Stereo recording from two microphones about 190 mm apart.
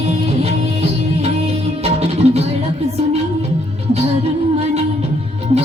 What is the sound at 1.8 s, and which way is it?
Music, 35° right (ahead or behind).